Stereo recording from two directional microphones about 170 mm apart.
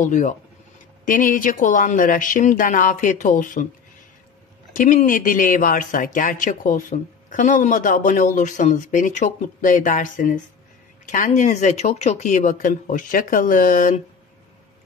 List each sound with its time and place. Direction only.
0.0 s speech: 50° left (ahead or behind)
4.7 s speech: 50° left (ahead or behind)